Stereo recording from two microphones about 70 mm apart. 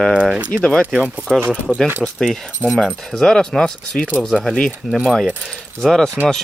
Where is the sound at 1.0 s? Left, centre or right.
Centre.